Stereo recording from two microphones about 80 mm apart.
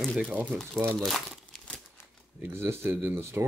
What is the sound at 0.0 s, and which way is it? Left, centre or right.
Speech, centre.